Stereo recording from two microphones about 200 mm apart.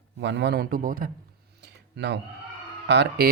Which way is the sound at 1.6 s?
60° right (ahead or behind).